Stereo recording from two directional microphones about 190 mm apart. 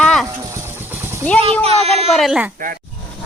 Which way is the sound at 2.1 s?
Centre (ahead or behind).